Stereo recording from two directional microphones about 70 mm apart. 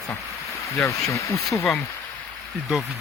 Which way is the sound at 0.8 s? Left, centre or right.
Left.